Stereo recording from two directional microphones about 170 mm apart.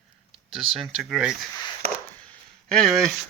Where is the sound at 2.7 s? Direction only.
Centre (ahead or behind).